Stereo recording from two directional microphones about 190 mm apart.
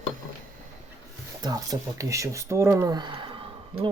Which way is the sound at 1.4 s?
20° right (ahead or behind).